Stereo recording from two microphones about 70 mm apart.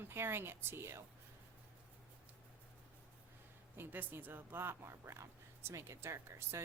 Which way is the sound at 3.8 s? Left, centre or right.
Right.